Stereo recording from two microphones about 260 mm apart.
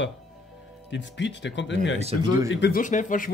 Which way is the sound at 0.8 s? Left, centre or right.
Left.